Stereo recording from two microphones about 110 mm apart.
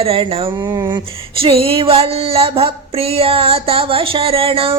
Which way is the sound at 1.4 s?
55° right (ahead or behind).